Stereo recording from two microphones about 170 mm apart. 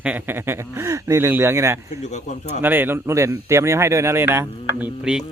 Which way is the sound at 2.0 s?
45° left (ahead or behind).